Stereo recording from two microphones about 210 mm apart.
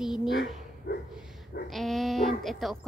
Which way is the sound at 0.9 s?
50° left (ahead or behind).